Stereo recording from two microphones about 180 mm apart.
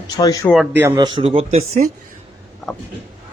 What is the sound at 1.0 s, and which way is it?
Speech, 25° right (ahead or behind).